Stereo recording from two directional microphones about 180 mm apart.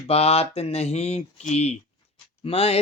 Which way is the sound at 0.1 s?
35° left (ahead or behind).